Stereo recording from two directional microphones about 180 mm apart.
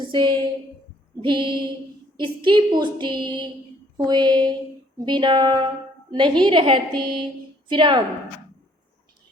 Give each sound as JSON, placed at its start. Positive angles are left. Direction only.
{"t": 0.1, "sound": "a woman's voice", "side_deg": -25}